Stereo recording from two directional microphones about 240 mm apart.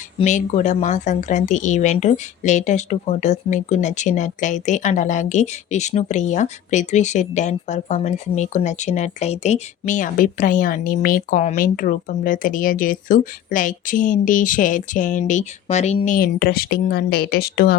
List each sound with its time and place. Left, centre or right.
0.2 s a woman's voice: left